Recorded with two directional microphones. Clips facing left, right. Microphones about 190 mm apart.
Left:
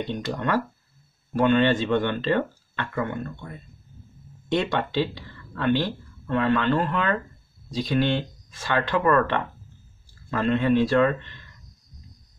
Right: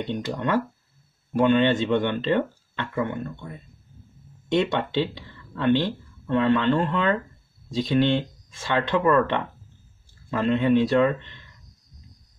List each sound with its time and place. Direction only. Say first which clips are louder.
0.0 s speech: right 1 dB; 20° right (ahead or behind)
4.5 s speech: right 2 dB; 20° right (ahead or behind)